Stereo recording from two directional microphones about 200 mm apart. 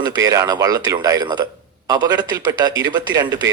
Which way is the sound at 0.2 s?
15° right (ahead or behind).